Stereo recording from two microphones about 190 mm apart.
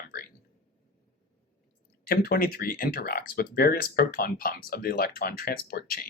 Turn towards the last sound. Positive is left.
turn(degrees=50)  # may be behind; listen again after turning